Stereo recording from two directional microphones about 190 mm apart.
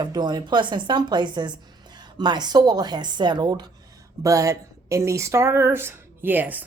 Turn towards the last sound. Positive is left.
turn(degrees=-10)  # may be behind; listen again after turning